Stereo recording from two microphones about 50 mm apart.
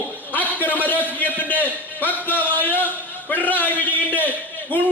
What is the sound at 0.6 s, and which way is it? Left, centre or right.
Speech, left.